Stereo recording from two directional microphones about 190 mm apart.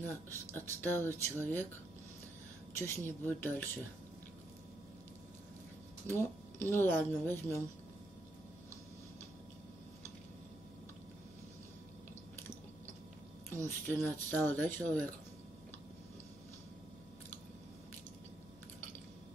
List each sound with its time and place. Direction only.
0.3 s speech: 10° left (ahead or behind)
2.7 s speech: 15° left (ahead or behind)
6.0 s speech: 10° left (ahead or behind)
13.5 s speech: 10° left (ahead or behind)